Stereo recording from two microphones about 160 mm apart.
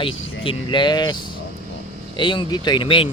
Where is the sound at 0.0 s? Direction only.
30° left (ahead or behind).